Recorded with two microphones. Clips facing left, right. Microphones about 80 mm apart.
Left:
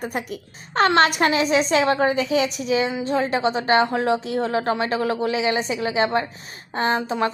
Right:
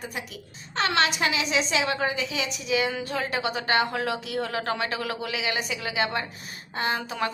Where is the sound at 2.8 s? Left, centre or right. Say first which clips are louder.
Left 6 dB; left.